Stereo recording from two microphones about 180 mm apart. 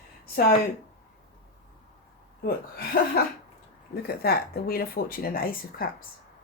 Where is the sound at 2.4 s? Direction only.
55° left (ahead or behind).